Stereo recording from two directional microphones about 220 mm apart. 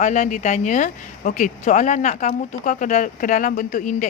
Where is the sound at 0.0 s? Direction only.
35° left (ahead or behind).